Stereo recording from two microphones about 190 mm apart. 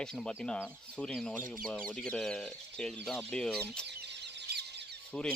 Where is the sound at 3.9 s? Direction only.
65° right (ahead or behind).